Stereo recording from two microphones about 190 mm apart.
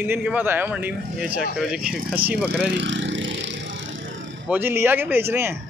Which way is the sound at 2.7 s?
70° right (ahead or behind).